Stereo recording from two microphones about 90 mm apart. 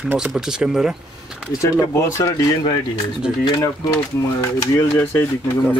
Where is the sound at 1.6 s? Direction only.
30° left (ahead or behind).